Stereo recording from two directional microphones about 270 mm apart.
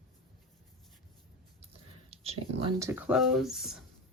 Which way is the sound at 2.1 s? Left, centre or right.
Right.